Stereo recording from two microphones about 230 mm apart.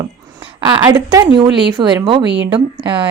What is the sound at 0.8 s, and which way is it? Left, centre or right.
A woman's voice, centre.